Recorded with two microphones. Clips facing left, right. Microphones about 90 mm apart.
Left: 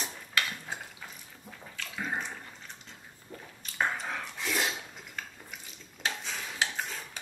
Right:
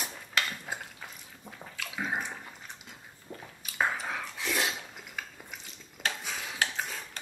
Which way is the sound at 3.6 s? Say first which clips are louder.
Right 1 dB; 5° right (ahead or behind).